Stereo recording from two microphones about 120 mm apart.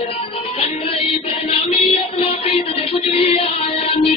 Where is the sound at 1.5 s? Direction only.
50° left (ahead or behind).